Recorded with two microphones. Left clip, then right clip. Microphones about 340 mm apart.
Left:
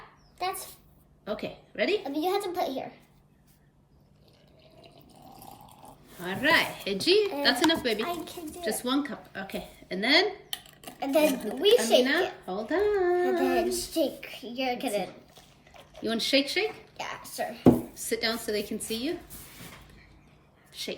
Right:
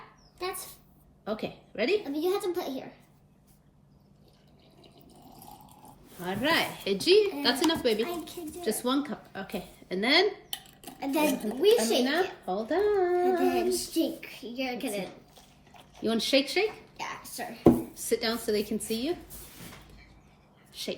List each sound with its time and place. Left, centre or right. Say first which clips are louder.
0.3 s dog: left 3 dB; centre
1.2 s speech: even; centre
2.0 s a child's voice: left 1 dB; centre
6.2 s a woman's voice: left 3 dB; centre
8.0 s a child's voice: left 2 dB; centre
8.6 s a woman's voice: even; centre
10.5 s speech: left 1 dB; centre
12.1 s a woman's voice: left 1 dB; centre
13.6 s a woman's voice: left 1 dB; centre
16.0 s a woman's voice: even; centre
17.0 s speech: left 1 dB; centre
17.9 s a woman's voice: even; centre
20.7 s a woman's voice: even; centre